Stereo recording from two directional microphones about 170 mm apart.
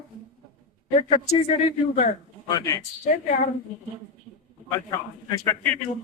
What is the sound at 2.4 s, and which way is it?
Speech, 20° left (ahead or behind).